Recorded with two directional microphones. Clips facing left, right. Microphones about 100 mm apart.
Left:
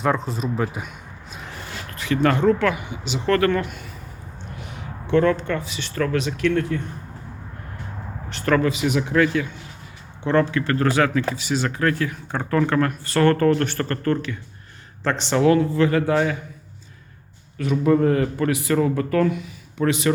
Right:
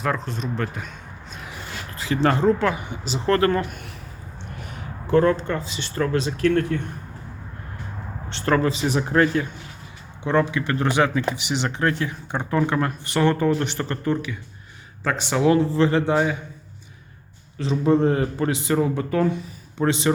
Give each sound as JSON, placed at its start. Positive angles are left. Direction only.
{"t": 0.0, "sound": "speech", "side_deg": 0}
{"t": 2.0, "sound": "speech", "side_deg": -25}
{"t": 4.5, "sound": "speech", "side_deg": -45}
{"t": 8.3, "sound": "speech", "side_deg": -30}
{"t": 10.2, "sound": "speech", "side_deg": -15}
{"t": 15.4, "sound": "speech", "side_deg": -30}
{"t": 16.1, "sound": "speech", "side_deg": -15}
{"t": 17.6, "sound": "speech", "side_deg": -25}